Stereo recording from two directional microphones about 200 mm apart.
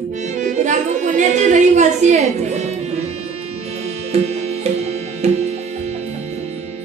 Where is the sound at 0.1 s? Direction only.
35° right (ahead or behind).